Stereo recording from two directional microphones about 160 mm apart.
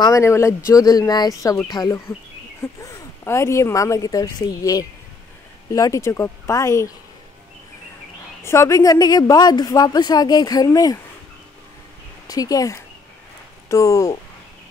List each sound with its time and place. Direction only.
0.0 s a woman's voice: 20° left (ahead or behind)
8.5 s a woman's voice: 20° left (ahead or behind)
12.3 s a woman's voice: 20° left (ahead or behind)